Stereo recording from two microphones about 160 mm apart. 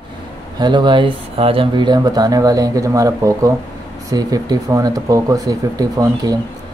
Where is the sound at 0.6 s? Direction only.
30° right (ahead or behind).